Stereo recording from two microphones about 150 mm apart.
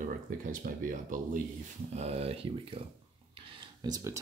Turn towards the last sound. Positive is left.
turn(degrees=-20)  # may be behind; listen again after turning